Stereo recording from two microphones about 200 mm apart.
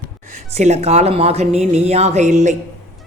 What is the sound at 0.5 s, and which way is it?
A man's voice, 30° right (ahead or behind).